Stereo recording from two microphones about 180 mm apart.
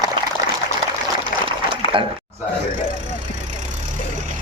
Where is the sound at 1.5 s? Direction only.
30° right (ahead or behind).